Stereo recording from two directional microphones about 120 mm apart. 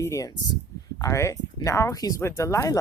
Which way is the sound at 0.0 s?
25° left (ahead or behind).